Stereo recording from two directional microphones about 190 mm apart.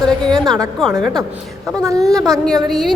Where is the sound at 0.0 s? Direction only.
Centre (ahead or behind).